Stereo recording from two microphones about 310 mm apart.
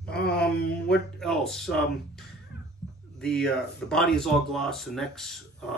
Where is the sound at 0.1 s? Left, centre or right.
Left.